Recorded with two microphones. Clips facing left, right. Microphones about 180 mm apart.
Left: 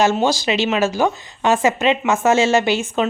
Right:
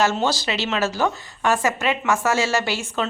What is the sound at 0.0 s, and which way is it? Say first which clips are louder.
A woman's voice: left 4 dB; 15° left (ahead or behind).